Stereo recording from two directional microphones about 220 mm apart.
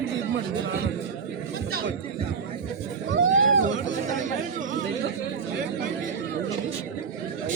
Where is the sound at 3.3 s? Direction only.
60° right (ahead or behind).